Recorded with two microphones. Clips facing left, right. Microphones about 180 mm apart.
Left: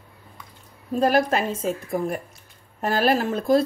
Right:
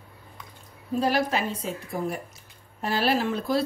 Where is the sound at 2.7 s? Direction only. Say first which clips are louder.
Left 4 dB; 50° left (ahead or behind).